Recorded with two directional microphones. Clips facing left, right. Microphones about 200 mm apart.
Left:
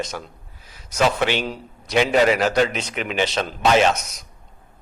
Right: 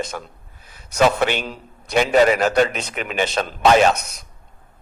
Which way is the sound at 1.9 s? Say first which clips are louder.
Right 2 dB; 45° right (ahead or behind).